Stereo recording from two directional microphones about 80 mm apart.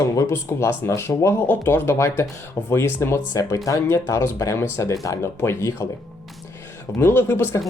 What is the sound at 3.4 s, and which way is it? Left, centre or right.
Speech, left.